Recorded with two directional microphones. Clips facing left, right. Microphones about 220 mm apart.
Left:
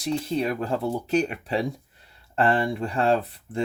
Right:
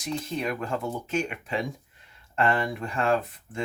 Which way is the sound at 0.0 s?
35° left (ahead or behind).